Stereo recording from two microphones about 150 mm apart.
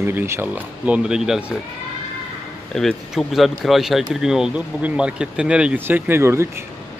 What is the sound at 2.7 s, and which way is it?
Speech, centre (ahead or behind).